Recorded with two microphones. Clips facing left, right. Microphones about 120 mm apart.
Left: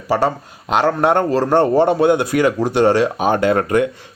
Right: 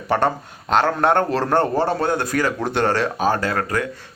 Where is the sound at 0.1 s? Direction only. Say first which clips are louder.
Left 2 dB; 5° left (ahead or behind).